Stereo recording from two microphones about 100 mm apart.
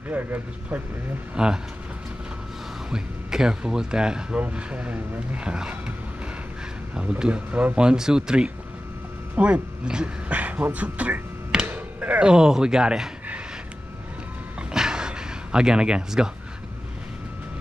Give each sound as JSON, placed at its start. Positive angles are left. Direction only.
{"t": 0.1, "sound": "speech", "side_deg": -20}
{"t": 2.9, "sound": "speech", "side_deg": -5}
{"t": 7.0, "sound": "speech", "side_deg": -10}
{"t": 14.7, "sound": "a sound", "side_deg": -5}